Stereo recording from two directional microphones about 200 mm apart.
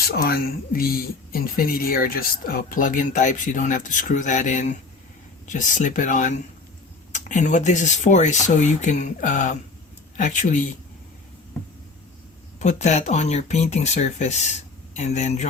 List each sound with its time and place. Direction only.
0.1 s speech: 50° left (ahead or behind)
12.5 s speech: 35° left (ahead or behind)